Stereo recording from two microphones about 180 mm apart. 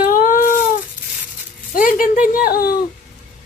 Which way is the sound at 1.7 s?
50° left (ahead or behind).